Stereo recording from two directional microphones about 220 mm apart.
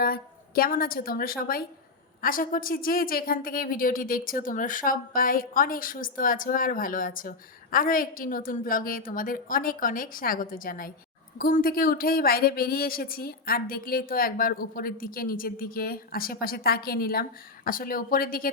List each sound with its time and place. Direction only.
0.0 s a woman's voice: 40° left (ahead or behind)